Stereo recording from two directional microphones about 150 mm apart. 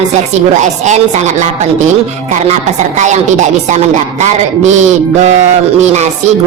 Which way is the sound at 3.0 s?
50° right (ahead or behind).